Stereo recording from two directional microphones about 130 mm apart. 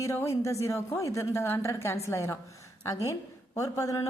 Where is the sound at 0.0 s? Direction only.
25° left (ahead or behind).